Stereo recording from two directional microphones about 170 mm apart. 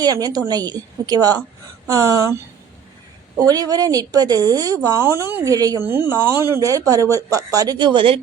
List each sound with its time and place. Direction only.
0.0 s a woman's voice: 20° right (ahead or behind)